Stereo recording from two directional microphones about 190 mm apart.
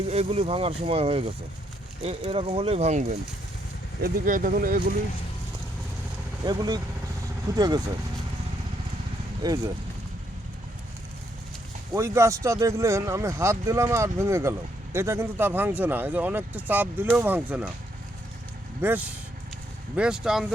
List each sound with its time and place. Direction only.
0.1 s speech: 30° right (ahead or behind)
4.0 s speech: 45° right (ahead or behind)
6.4 s speech: 20° right (ahead or behind)
9.4 s speech: 20° right (ahead or behind)
11.9 s speech: 15° right (ahead or behind)
18.8 s speech: 10° right (ahead or behind)